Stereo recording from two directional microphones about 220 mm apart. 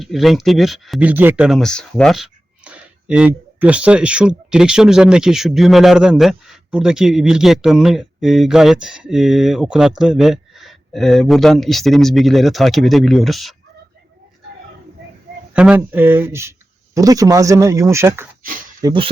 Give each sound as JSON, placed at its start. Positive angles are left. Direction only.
{"t": 0.0, "sound": "speech", "side_deg": 0}
{"t": 15.5, "sound": "speech", "side_deg": -5}